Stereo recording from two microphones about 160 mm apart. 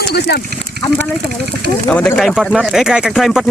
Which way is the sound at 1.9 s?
10° left (ahead or behind).